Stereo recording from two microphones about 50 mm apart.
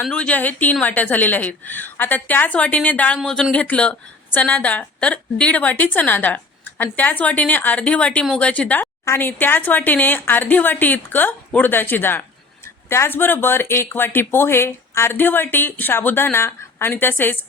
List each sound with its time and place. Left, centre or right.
0.0 s a woman's voice: centre
0.3 s a woman's voice: left
9.1 s a woman's voice: left
12.6 s a sound: left
13.1 s speech: left
15.1 s speech: left